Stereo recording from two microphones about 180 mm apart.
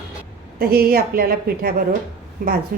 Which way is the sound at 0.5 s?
55° right (ahead or behind).